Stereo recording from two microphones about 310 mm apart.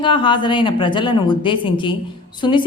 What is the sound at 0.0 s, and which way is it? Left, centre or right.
A woman's voice, centre.